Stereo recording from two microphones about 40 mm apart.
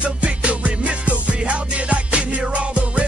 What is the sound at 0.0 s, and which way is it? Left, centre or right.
Music, right.